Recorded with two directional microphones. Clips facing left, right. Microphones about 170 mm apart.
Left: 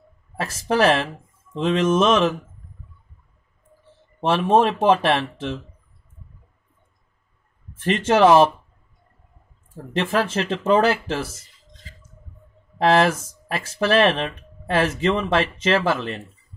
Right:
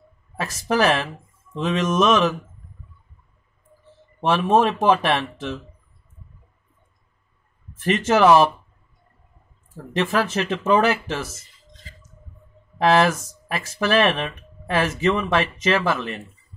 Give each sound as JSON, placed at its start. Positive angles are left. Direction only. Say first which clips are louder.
{"t": 0.4, "sound": "speech", "louder": "left 1 dB", "side_deg": 30}
{"t": 4.2, "sound": "speech", "louder": "left 1 dB", "side_deg": 30}
{"t": 7.8, "sound": "speech", "louder": "left 1 dB", "side_deg": 30}
{"t": 9.9, "sound": "speech", "louder": "even", "side_deg": 30}
{"t": 12.7, "sound": "speech", "louder": "even", "side_deg": 30}